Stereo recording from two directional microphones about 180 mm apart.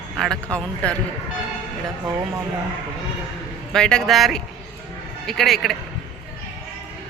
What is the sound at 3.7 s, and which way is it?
Speech, 5° left (ahead or behind).